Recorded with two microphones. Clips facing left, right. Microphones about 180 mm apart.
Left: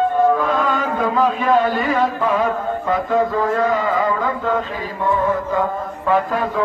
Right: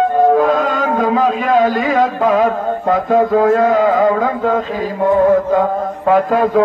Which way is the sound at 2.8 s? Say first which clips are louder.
Right 6 dB; 50° right (ahead or behind).